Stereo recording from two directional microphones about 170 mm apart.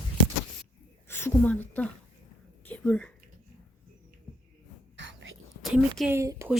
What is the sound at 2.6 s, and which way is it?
Whispering, 10° left (ahead or behind).